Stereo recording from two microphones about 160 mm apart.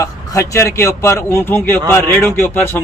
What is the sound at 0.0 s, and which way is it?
A man's voice, 20° left (ahead or behind).